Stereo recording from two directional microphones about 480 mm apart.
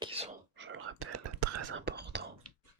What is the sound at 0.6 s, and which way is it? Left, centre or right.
Whispering, right.